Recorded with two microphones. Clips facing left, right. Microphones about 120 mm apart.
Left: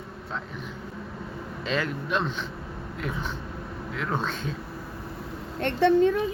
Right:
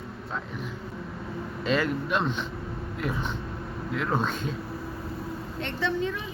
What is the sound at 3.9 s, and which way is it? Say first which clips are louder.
Speech: right 2 dB; 5° right (ahead or behind).